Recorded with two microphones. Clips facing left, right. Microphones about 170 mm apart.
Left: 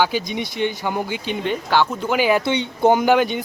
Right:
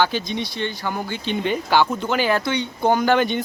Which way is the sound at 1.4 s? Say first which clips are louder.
Even; centre (ahead or behind).